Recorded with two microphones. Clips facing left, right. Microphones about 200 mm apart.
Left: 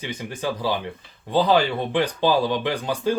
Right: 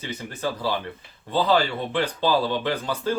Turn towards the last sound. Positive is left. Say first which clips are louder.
# left 2 dB
turn(degrees=15)  # may be behind; listen again after turning